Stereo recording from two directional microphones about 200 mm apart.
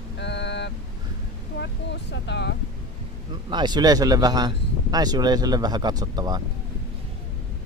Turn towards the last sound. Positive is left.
turn(degrees=-20)  # may be behind; listen again after turning